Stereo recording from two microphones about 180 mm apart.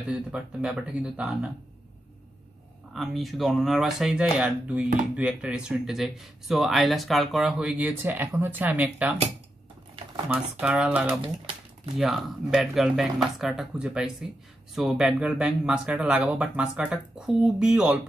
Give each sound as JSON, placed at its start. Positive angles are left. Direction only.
{"t": 0.1, "sound": "speech", "side_deg": -5}
{"t": 2.9, "sound": "speech", "side_deg": 0}
{"t": 10.3, "sound": "speech", "side_deg": -5}
{"t": 11.1, "sound": "typing", "side_deg": -30}
{"t": 12.0, "sound": "speech", "side_deg": 0}